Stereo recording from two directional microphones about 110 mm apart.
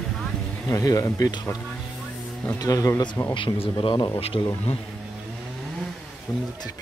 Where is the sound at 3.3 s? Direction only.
50° left (ahead or behind).